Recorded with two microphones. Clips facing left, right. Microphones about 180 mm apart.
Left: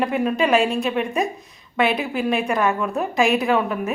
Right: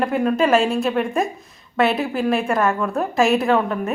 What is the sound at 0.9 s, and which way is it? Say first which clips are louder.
Speech: right 2 dB; 20° left (ahead or behind).